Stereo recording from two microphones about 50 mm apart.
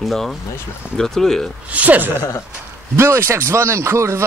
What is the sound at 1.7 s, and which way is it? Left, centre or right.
Speech, right.